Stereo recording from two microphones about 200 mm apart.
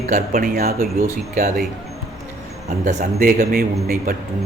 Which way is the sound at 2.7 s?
40° right (ahead or behind).